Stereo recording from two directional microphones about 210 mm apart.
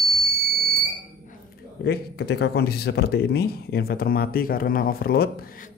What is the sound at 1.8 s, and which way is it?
Speech, 50° left (ahead or behind).